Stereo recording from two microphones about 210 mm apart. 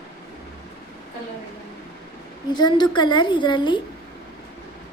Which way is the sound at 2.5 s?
20° left (ahead or behind).